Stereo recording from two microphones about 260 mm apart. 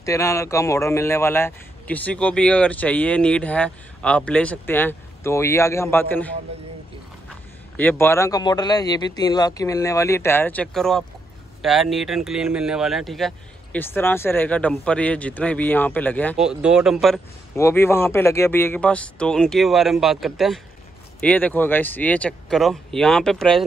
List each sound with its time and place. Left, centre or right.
0.0 s speech: centre